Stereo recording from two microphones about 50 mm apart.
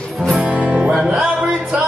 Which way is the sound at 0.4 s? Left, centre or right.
Centre.